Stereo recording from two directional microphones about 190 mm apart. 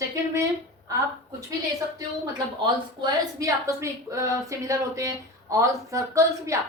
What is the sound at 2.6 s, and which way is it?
A woman's voice, 20° right (ahead or behind).